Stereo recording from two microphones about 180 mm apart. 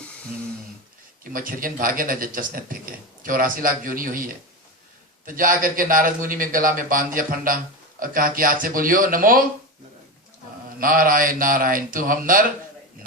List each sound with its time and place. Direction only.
1.2 s a man's voice: 50° right (ahead or behind)
10.8 s a man's voice: 50° right (ahead or behind)